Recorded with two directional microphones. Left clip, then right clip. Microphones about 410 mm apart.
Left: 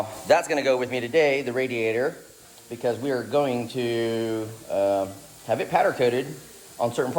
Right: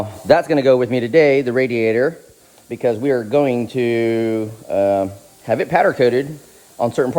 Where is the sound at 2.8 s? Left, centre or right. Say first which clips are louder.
Right 8 dB; right.